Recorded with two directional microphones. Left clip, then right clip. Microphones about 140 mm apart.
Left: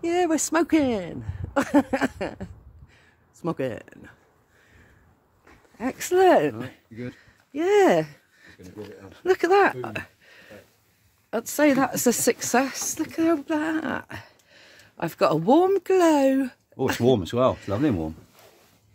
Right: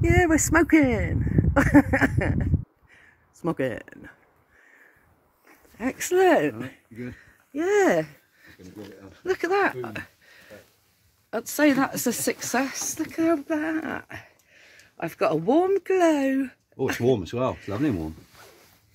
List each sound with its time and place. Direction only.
0.0 s speech: 10° right (ahead or behind)
6.0 s speech: 15° left (ahead or behind)
9.1 s speech: 60° left (ahead or behind); by 11.9 s 25° left (ahead or behind)
12.1 s speech: 70° left (ahead or behind); by 17.6 s 50° left (ahead or behind)
17.6 s speech: 30° left (ahead or behind)